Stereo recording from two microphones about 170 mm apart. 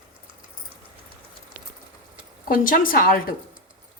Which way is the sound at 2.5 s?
55° left (ahead or behind).